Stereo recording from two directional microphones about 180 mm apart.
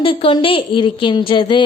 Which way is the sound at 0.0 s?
30° left (ahead or behind).